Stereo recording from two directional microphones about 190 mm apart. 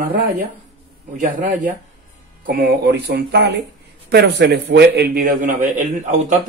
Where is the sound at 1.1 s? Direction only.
40° right (ahead or behind).